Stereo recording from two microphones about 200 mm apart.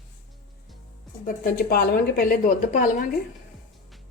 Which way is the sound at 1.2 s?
45° left (ahead or behind).